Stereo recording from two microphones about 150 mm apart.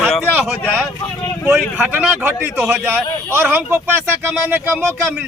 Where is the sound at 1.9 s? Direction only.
10° right (ahead or behind).